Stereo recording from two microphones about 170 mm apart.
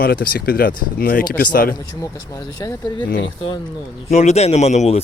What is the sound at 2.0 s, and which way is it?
Speech, 20° left (ahead or behind).